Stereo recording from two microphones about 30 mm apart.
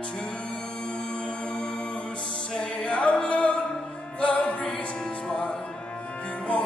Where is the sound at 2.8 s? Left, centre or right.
Left.